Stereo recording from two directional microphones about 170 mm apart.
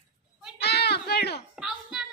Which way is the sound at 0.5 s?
75° left (ahead or behind).